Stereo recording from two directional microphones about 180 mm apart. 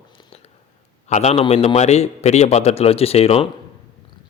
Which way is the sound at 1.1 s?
40° left (ahead or behind).